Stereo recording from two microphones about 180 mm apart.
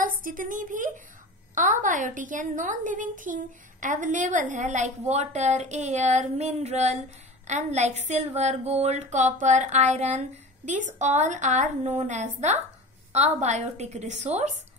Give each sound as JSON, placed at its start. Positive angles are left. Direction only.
{"t": 0.0, "sound": "a woman's voice", "side_deg": -50}